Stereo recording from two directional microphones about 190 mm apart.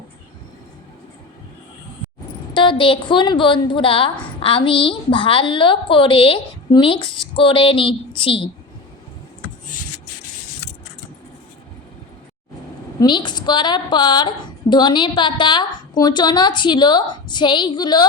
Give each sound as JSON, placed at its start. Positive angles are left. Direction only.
{"t": 2.5, "sound": "a woman's voice", "side_deg": 25}
{"t": 13.0, "sound": "a woman's voice", "side_deg": 25}